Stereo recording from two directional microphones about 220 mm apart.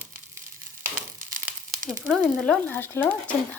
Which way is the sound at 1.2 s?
40° right (ahead or behind).